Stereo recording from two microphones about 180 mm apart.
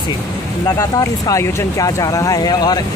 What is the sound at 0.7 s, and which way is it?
Speech, 20° left (ahead or behind).